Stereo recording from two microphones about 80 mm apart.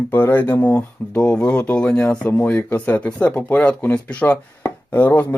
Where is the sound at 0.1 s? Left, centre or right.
Left.